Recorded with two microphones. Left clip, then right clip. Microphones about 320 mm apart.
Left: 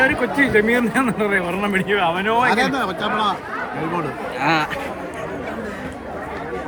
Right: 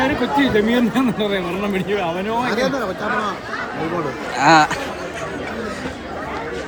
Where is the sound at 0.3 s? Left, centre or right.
Centre.